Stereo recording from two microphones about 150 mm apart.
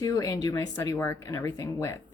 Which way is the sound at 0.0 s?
25° left (ahead or behind).